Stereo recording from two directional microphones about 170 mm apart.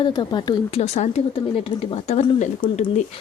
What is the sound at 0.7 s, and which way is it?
A woman's voice, 40° left (ahead or behind).